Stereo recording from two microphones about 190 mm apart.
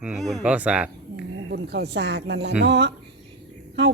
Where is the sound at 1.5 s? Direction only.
65° right (ahead or behind).